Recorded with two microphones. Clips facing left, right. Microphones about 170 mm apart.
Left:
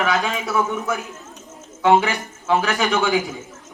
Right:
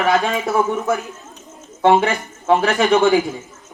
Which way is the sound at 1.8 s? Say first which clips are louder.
Right 2 dB; 50° right (ahead or behind).